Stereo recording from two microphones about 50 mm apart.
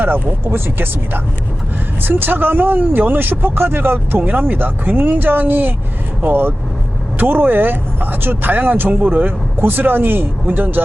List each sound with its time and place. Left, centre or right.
0.0 s speech: right